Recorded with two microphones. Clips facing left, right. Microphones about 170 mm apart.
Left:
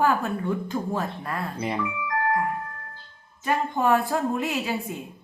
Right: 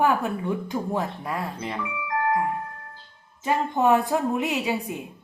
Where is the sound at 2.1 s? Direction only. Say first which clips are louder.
Right 2 dB; 20° right (ahead or behind).